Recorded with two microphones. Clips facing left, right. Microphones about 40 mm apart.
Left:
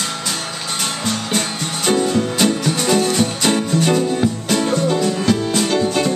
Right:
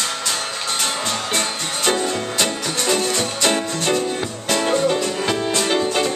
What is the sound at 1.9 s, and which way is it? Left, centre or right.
Music, centre.